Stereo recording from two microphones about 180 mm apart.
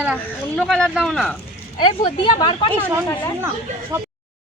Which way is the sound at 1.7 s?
25° left (ahead or behind).